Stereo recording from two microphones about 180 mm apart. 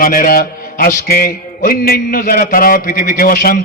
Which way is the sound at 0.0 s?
55° left (ahead or behind).